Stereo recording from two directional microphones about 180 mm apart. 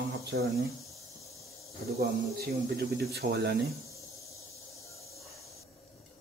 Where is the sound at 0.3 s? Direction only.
65° right (ahead or behind).